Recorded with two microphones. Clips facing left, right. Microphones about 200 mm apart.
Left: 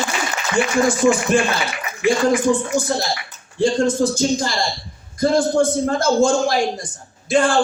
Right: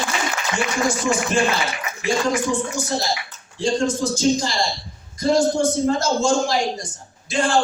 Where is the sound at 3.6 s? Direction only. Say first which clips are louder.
Left 4 dB; 55° left (ahead or behind).